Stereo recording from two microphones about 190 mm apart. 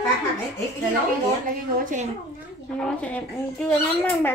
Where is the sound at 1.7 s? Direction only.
45° right (ahead or behind).